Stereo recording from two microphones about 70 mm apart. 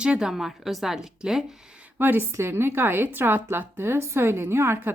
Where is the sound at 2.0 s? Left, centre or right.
Right.